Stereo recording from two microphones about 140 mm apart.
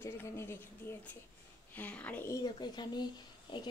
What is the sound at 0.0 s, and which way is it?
Speech, 20° left (ahead or behind).